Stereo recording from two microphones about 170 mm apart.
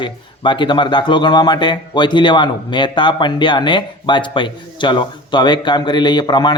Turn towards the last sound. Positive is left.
turn(degrees=25)  # may be behind; listen again after turning